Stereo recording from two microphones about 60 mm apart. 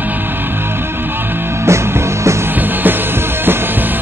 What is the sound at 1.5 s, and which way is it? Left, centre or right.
Music, right.